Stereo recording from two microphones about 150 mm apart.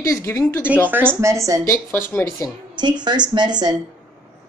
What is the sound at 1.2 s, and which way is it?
Speech, 20° right (ahead or behind).